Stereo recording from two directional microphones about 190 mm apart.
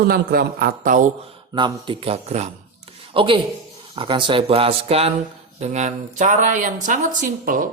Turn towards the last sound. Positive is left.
turn(degrees=-45)  # may be behind; listen again after turning